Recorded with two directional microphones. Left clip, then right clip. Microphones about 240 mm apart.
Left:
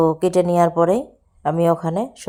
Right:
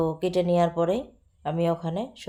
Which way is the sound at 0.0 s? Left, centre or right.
Left.